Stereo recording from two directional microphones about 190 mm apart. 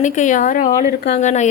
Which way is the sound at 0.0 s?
40° left (ahead or behind).